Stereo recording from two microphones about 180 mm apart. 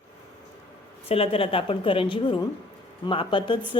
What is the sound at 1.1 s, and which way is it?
A woman's voice, 30° left (ahead or behind).